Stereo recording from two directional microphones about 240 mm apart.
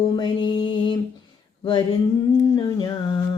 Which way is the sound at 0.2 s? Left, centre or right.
Centre.